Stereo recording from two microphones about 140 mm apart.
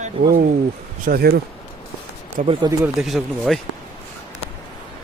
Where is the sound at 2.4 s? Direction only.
65° right (ahead or behind).